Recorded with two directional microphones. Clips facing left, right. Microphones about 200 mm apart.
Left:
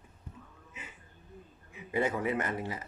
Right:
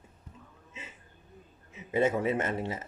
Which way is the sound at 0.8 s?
25° right (ahead or behind).